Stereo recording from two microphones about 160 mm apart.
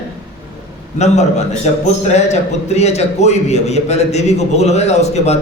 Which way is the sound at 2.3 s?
45° left (ahead or behind).